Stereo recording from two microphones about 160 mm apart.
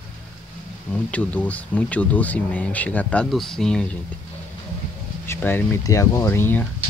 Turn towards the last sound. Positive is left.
turn(degrees=15)  # may be behind; listen again after turning